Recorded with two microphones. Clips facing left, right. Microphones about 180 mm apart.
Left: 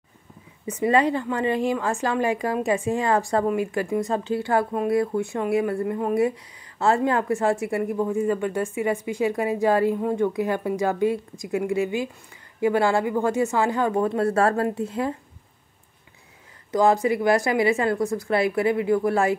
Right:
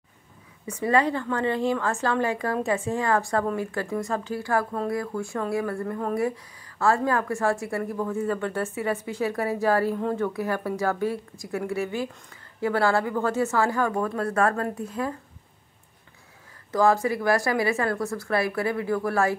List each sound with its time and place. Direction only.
0.7 s a woman's voice: 20° left (ahead or behind)
16.7 s speech: 20° left (ahead or behind)